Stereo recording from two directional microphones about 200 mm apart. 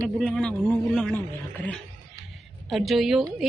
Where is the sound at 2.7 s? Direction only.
Centre (ahead or behind).